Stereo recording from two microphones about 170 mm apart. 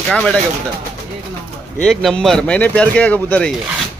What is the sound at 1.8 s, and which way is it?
A man's voice, 5° left (ahead or behind).